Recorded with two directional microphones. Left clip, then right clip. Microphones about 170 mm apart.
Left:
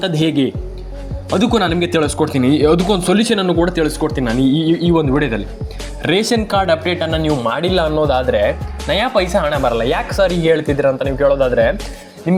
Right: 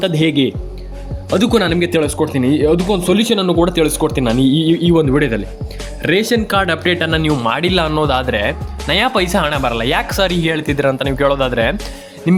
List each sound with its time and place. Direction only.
0.0 s speech: 5° right (ahead or behind)
1.4 s speech: 15° right (ahead or behind)
6.0 s speech: 5° right (ahead or behind)
6.5 s speech: 15° right (ahead or behind)
10.1 s speech: 25° right (ahead or behind)
10.4 s speech: 10° right (ahead or behind)
10.8 s speech: 20° right (ahead or behind)